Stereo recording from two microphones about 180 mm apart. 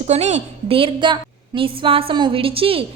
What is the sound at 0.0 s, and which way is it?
A woman's voice, 40° right (ahead or behind).